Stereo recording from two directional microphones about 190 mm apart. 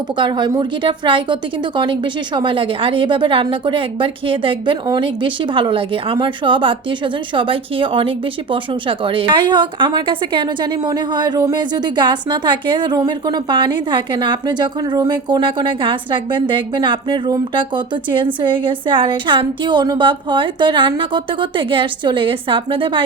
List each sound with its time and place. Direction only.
0.2 s a woman's voice: 25° right (ahead or behind)